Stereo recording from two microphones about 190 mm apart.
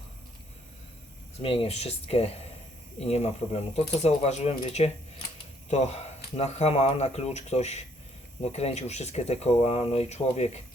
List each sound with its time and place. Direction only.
1.4 s speech: 30° left (ahead or behind)